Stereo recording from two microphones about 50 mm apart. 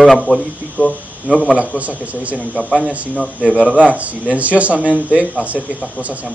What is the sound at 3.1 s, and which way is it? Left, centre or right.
Speech, left.